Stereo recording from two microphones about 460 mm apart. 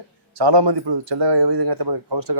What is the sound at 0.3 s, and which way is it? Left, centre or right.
Speech, right.